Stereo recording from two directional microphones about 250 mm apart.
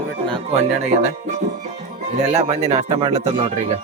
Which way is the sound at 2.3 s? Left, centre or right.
Right.